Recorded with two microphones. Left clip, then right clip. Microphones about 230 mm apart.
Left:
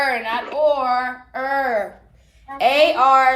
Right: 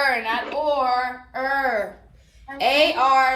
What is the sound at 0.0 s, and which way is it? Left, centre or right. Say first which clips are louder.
Speech: left 1 dB; left.